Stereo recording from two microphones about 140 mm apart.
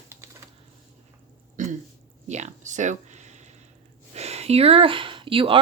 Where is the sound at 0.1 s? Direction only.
20° right (ahead or behind).